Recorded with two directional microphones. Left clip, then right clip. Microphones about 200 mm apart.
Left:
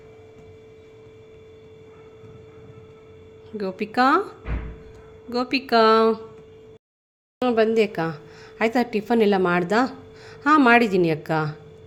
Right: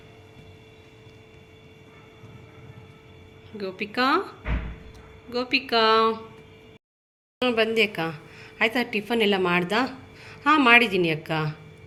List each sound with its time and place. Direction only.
3.6 s speech: 50° left (ahead or behind)
5.3 s speech: 50° left (ahead or behind)
7.4 s a woman's voice: 30° left (ahead or behind)